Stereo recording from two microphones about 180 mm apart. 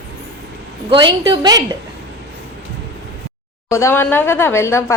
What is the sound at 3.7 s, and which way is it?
A woman's voice, 15° left (ahead or behind).